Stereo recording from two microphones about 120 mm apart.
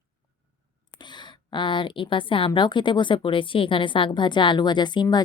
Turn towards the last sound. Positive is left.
turn(degrees=40)  # may be behind; listen again after turning